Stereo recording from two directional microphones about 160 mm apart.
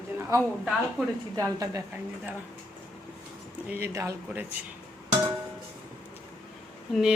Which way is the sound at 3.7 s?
15° right (ahead or behind).